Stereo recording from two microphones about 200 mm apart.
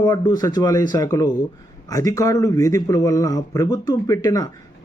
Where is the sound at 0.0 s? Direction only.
20° left (ahead or behind).